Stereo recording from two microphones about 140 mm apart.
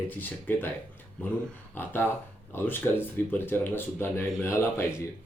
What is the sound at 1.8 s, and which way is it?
Speech, 15° left (ahead or behind).